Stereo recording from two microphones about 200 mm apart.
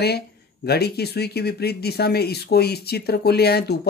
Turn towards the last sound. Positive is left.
turn(degrees=55)  # may be behind; listen again after turning